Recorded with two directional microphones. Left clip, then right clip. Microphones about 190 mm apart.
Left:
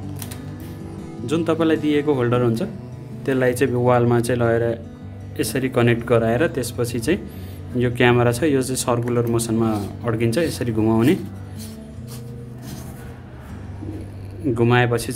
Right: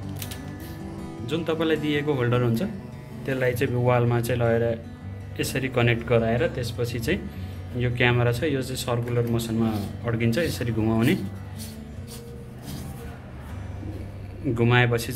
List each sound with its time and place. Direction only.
1.2 s a man's voice: 35° left (ahead or behind)
14.5 s a man's voice: 30° left (ahead or behind)